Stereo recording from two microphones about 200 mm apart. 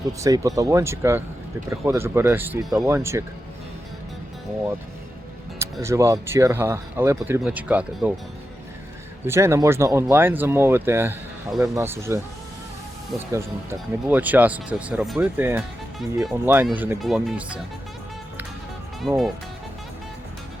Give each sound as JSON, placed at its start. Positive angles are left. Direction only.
{"t": 0.2, "sound": "speech", "side_deg": -15}
{"t": 5.8, "sound": "speech", "side_deg": -15}
{"t": 9.2, "sound": "speech", "side_deg": -15}
{"t": 13.3, "sound": "speech", "side_deg": -10}
{"t": 19.0, "sound": "speech", "side_deg": 0}